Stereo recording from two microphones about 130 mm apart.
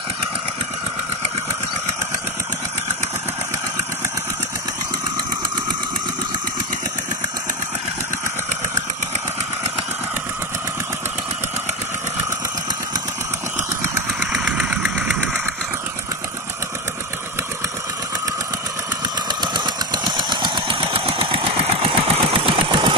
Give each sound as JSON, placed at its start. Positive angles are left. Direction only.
{"t": 14.4, "sound": "engine", "side_deg": -10}
{"t": 19.2, "sound": "engine", "side_deg": -35}